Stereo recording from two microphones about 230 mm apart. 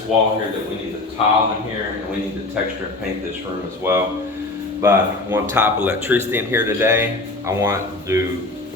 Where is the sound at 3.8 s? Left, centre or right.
Centre.